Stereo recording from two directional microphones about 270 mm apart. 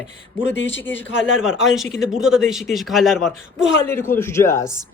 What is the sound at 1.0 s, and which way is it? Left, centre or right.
Speech, left.